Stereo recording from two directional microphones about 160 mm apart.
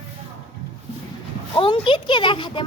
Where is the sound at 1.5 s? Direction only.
30° left (ahead or behind).